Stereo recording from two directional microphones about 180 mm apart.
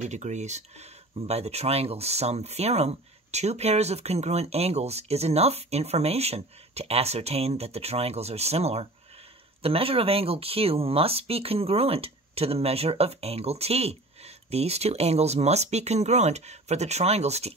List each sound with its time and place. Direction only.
0.0 s speech: 40° right (ahead or behind)